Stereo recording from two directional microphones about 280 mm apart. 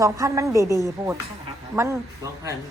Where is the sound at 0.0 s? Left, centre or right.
Centre.